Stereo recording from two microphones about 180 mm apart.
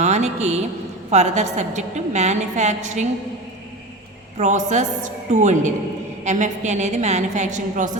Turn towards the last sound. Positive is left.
turn(degrees=-40)  # may be behind; listen again after turning